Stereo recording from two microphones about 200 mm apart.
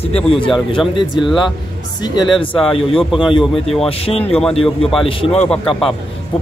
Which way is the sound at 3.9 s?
30° left (ahead or behind).